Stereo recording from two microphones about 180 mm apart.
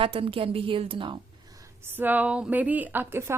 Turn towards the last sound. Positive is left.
turn(degrees=-15)  # may be behind; listen again after turning